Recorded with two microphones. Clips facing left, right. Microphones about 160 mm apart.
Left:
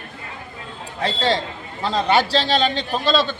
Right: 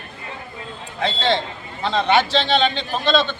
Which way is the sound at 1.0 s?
35° left (ahead or behind).